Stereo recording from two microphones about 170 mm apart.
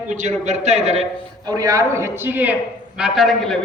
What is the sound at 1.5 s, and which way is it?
A man's voice, 20° right (ahead or behind).